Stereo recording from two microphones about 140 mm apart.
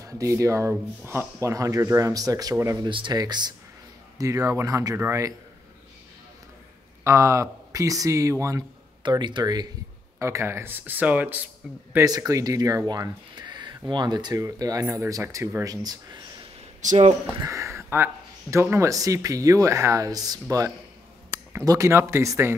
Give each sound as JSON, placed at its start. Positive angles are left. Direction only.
{"t": 0.0, "sound": "speech", "side_deg": -25}
{"t": 7.1, "sound": "speech", "side_deg": -20}
{"t": 12.0, "sound": "speech", "side_deg": -25}
{"t": 16.8, "sound": "speech", "side_deg": -55}
{"t": 17.4, "sound": "speech", "side_deg": -20}